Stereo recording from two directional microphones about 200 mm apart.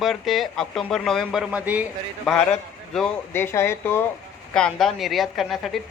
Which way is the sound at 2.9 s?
5° left (ahead or behind).